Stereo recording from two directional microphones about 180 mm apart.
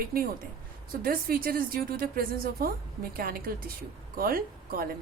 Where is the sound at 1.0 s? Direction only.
55° right (ahead or behind).